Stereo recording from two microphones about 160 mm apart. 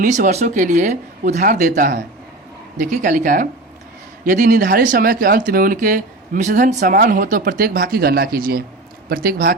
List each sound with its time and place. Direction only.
0.0 s speech: 50° right (ahead or behind); by 9.6 s 65° right (ahead or behind)